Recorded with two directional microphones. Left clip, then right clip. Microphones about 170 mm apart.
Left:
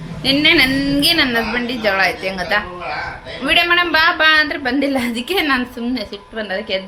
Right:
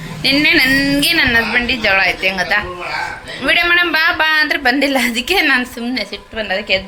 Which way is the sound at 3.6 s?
Centre (ahead or behind).